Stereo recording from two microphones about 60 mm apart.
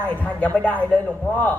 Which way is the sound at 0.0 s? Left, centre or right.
Left.